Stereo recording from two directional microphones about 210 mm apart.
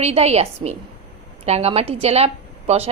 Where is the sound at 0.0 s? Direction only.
30° right (ahead or behind).